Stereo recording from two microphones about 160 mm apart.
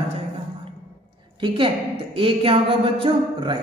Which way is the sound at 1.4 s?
30° right (ahead or behind).